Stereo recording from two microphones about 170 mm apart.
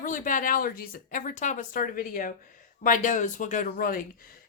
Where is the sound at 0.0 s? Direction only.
50° left (ahead or behind).